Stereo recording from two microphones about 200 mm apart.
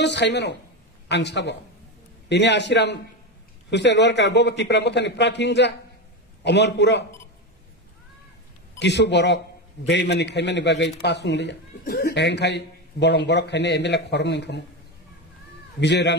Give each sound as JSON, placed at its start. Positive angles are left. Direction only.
{"t": 0.0, "sound": "a man's voice", "side_deg": 60}
{"t": 8.7, "sound": "speech", "side_deg": 60}
{"t": 15.8, "sound": "speech", "side_deg": 60}